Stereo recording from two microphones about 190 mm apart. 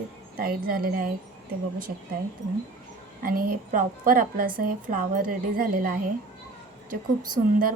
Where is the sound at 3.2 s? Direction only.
50° right (ahead or behind).